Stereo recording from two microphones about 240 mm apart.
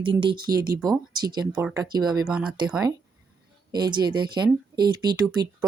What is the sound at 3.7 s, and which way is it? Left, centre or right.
Speech, centre.